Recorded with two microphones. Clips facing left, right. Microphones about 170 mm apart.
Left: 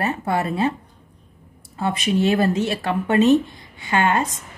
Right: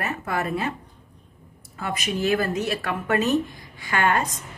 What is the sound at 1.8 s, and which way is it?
A woman's voice, 30° left (ahead or behind).